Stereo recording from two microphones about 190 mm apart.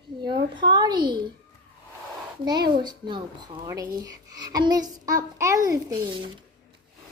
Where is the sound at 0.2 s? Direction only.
25° right (ahead or behind).